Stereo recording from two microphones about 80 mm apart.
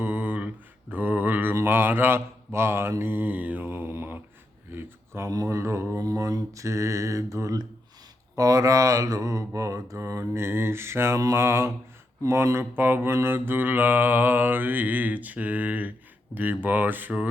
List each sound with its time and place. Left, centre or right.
0.0 s mantra: right
4.7 s speech: right
5.3 s mantra: right; by 17.2 s centre